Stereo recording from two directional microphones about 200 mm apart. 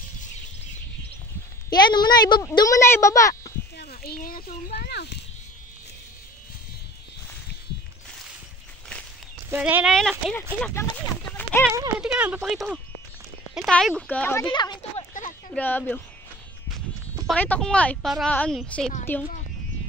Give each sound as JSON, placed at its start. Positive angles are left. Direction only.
{"t": 1.7, "sound": "a woman's voice", "side_deg": 20}
{"t": 3.7, "sound": "a sound", "side_deg": 50}
{"t": 9.5, "sound": "speech", "side_deg": -10}
{"t": 10.6, "sound": "a woman's voice", "side_deg": 15}
{"t": 12.0, "sound": "speech", "side_deg": -5}
{"t": 14.4, "sound": "a sound", "side_deg": 20}
{"t": 15.5, "sound": "a woman's voice", "side_deg": 10}
{"t": 17.3, "sound": "a woman's voice", "side_deg": 5}